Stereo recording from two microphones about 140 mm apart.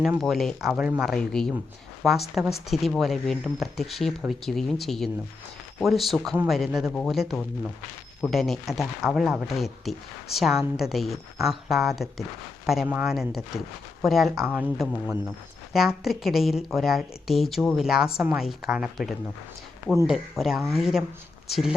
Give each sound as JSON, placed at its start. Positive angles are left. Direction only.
{"t": 0.2, "sound": "a woman's voice", "side_deg": 0}
{"t": 14.4, "sound": "speech", "side_deg": -10}
{"t": 15.7, "sound": "speech", "side_deg": 0}